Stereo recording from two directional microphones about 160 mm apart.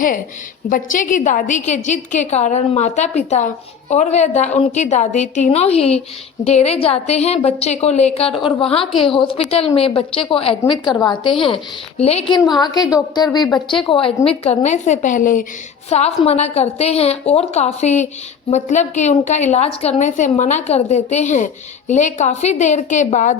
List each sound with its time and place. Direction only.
0.7 s a woman's voice: 55° left (ahead or behind); by 12.4 s 35° left (ahead or behind)
12.5 s a woman's voice: 25° left (ahead or behind); by 15.4 s 55° left (ahead or behind)
15.9 s a woman's voice: 40° left (ahead or behind)